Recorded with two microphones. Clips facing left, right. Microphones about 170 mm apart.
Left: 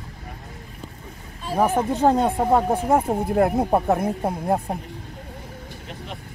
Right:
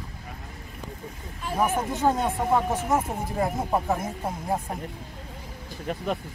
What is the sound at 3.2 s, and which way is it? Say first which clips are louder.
Speech: left 8 dB; 60° left (ahead or behind).